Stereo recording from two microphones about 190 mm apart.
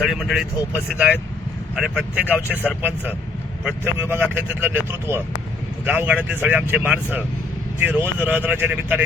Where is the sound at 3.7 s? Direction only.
10° right (ahead or behind).